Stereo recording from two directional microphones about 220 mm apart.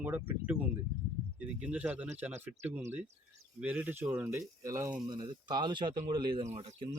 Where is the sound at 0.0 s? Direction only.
10° right (ahead or behind).